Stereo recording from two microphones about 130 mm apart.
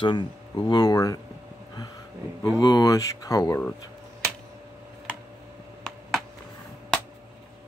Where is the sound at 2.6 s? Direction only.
25° left (ahead or behind).